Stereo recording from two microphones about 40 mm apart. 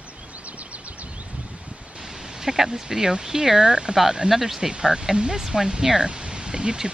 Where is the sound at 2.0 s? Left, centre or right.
Centre.